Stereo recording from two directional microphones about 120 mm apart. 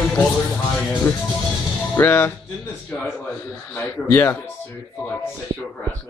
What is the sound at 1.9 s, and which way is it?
Speech, 20° left (ahead or behind).